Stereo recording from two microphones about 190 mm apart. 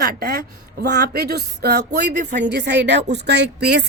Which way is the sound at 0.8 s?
55° right (ahead or behind).